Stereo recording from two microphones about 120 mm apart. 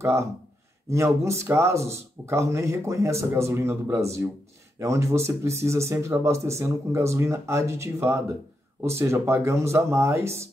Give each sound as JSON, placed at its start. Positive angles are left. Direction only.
{"t": 0.0, "sound": "speech", "side_deg": -25}